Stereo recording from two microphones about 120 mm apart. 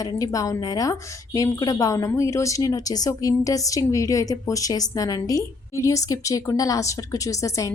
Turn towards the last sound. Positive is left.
turn(degrees=25)  # may be behind; listen again after turning